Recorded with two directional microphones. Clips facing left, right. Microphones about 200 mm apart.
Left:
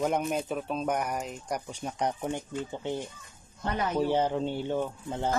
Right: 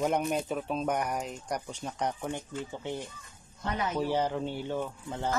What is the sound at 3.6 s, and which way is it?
Mantra, 40° left (ahead or behind).